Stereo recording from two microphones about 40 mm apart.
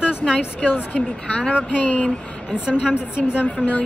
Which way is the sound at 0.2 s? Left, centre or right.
Centre.